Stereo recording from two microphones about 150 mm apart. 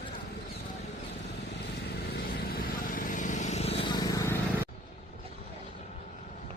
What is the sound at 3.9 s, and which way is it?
Vehicle, 25° left (ahead or behind).